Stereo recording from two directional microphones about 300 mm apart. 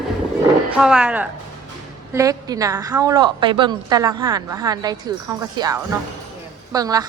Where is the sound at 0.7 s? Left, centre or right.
Centre.